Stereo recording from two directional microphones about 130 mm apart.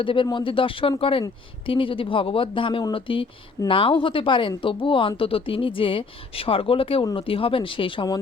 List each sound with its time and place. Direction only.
0.0 s speech: 40° left (ahead or behind)